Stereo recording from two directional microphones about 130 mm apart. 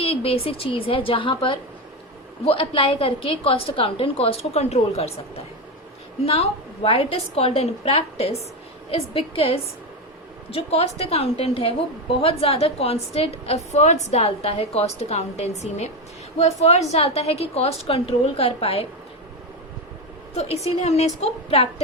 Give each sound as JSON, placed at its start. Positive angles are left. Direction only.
{"t": 0.0, "sound": "a woman's voice", "side_deg": 50}
{"t": 6.2, "sound": "a woman's voice", "side_deg": 50}
{"t": 20.3, "sound": "a woman's voice", "side_deg": 55}